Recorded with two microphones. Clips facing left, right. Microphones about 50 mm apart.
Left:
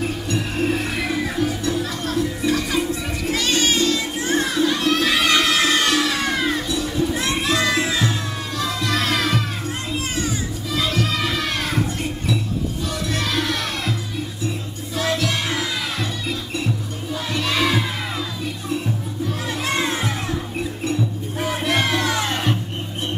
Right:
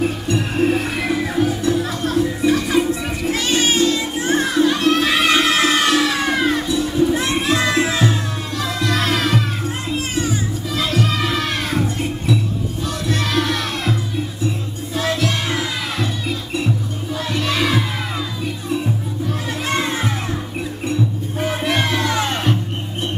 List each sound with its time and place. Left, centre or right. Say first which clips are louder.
0.0 s music: right 4 dB; centre
10.2 s music: right 3 dB; centre
13.1 s music: right 4 dB; centre
15.0 s music: right 2 dB; centre
19.8 s music: right 1 dB; centre
21.4 s music: right 2 dB; centre
21.9 s music: right 1 dB; centre